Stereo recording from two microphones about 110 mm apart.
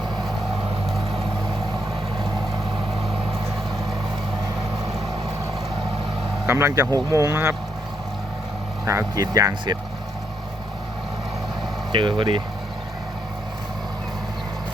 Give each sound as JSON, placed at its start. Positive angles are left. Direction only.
{"t": 6.5, "sound": "speech", "side_deg": -25}
{"t": 8.9, "sound": "speech", "side_deg": -30}
{"t": 11.9, "sound": "speech", "side_deg": -50}